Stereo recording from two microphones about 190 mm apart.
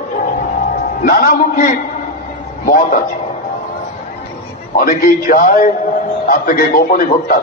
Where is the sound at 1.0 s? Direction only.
50° left (ahead or behind).